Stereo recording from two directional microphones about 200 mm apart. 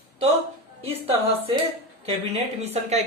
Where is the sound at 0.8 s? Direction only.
30° right (ahead or behind).